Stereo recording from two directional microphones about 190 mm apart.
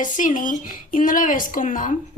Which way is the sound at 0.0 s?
45° left (ahead or behind).